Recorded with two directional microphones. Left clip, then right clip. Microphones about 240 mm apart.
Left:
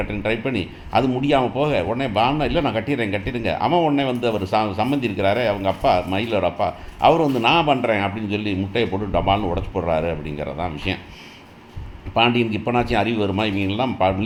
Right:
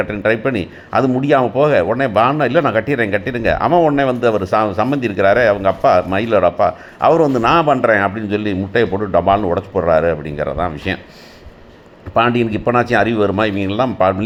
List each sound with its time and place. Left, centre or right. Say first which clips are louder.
0.1 s a man's voice: right 7 dB; centre
12.1 s a man's voice: right 4 dB; centre